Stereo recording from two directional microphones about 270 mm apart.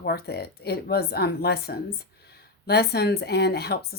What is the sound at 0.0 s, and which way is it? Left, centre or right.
Speech, left.